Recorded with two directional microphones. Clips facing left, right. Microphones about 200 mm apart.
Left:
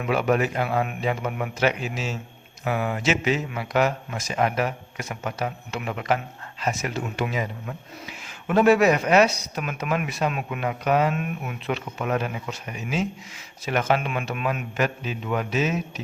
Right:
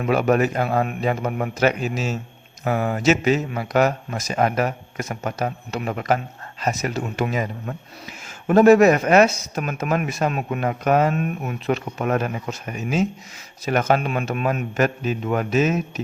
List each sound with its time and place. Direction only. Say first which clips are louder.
0.0 s speech: right 4 dB; 40° right (ahead or behind)